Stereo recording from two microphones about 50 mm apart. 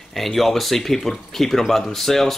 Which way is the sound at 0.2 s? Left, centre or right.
Centre.